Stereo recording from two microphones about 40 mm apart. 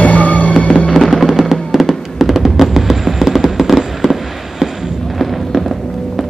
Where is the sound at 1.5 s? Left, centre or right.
Centre.